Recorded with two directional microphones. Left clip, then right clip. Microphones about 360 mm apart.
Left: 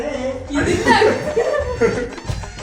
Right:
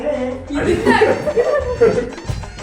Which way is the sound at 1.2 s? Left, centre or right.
Centre.